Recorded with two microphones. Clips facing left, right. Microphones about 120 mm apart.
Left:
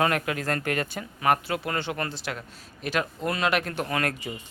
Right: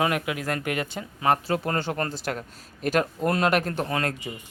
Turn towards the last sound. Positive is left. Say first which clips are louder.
# right 1 dB
turn(degrees=-25)  # may be behind; listen again after turning